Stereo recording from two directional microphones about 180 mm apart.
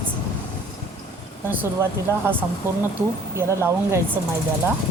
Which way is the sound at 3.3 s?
15° right (ahead or behind).